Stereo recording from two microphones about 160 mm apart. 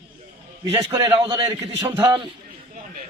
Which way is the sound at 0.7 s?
25° right (ahead or behind).